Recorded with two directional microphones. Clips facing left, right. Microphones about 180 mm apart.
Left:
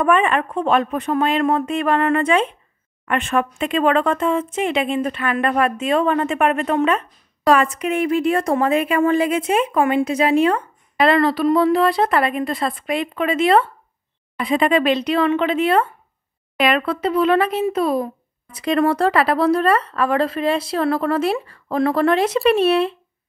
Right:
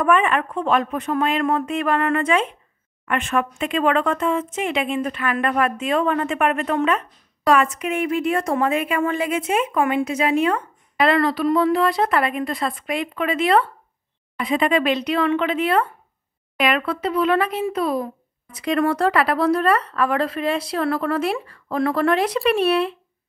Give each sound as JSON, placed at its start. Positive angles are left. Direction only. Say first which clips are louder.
{"t": 0.0, "sound": "speech", "louder": "left 1 dB", "side_deg": 30}